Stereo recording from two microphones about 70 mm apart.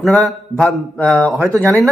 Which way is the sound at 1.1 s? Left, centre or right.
Right.